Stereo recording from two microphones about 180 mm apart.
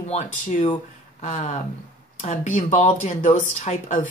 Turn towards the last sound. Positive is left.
turn(degrees=45)  # may be behind; listen again after turning